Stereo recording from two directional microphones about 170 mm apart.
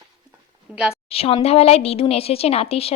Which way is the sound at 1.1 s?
35° left (ahead or behind).